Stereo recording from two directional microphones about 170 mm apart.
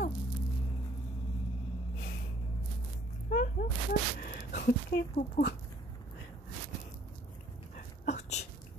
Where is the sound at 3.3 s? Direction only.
55° left (ahead or behind).